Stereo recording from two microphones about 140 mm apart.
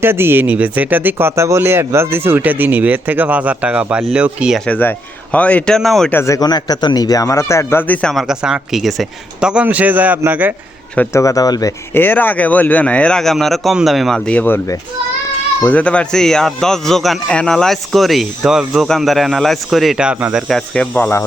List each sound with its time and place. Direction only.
0.0 s speech: 15° right (ahead or behind)
4.6 s speech: 10° left (ahead or behind)
6.1 s speech: 20° left (ahead or behind)
8.1 s speech: centre (ahead or behind)
10.9 s speech: 10° left (ahead or behind)
11.2 s speech: 25° left (ahead or behind)
11.9 s a man's voice: 15° left (ahead or behind); by 20.4 s 5° right (ahead or behind)
20.5 s speech: 5° left (ahead or behind)